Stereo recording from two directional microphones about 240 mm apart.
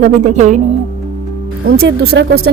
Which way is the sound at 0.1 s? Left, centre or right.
Right.